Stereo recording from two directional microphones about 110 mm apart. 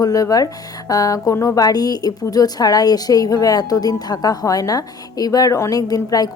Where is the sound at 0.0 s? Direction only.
35° left (ahead or behind).